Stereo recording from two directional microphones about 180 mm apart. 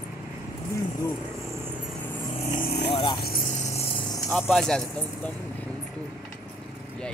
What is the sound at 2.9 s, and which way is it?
Vehicle, 30° left (ahead or behind).